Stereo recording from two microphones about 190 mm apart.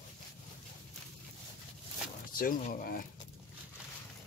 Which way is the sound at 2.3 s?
45° left (ahead or behind).